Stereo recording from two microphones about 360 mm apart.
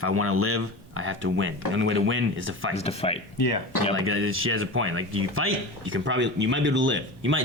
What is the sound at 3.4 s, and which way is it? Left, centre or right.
Speech, left.